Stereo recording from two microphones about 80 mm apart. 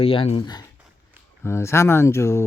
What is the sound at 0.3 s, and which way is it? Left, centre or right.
Speech, left.